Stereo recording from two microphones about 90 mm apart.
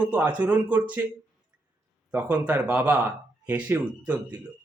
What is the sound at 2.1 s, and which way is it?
Speech, 15° right (ahead or behind).